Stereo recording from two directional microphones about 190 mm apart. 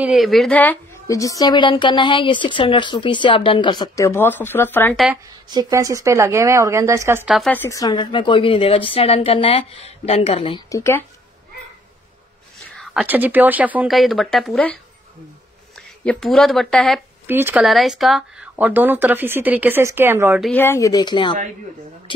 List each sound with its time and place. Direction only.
0.0 s a woman's voice: centre (ahead or behind)
5.5 s speech: 20° right (ahead or behind)
7.3 s a woman's voice: 5° left (ahead or behind); by 10.8 s 25° left (ahead or behind)
10.8 s a woman's voice: 15° left (ahead or behind)
12.7 s speech: 5° right (ahead or behind)
16.0 s speech: 5° left (ahead or behind)
17.3 s speech: 10° right (ahead or behind)
17.6 s speech: centre (ahead or behind)
20.4 s a woman's voice: 10° left (ahead or behind)